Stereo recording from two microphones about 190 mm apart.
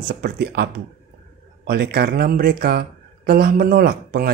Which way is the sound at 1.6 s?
55° right (ahead or behind).